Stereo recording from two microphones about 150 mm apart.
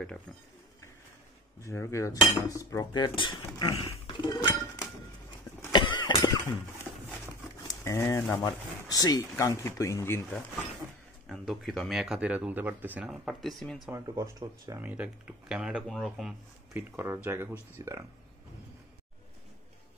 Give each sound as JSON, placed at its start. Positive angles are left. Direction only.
{"t": 1.6, "sound": "speech", "side_deg": 20}
{"t": 5.7, "sound": "a sound", "side_deg": 30}
{"t": 7.6, "sound": "speech", "side_deg": 20}
{"t": 11.2, "sound": "speech", "side_deg": 0}
{"t": 13.8, "sound": "speech", "side_deg": -20}
{"t": 16.9, "sound": "speech", "side_deg": -15}